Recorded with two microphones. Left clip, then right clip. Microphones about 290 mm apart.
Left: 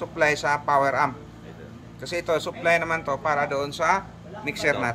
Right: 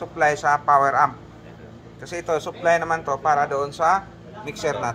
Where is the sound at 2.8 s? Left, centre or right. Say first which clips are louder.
Right 3 dB; centre.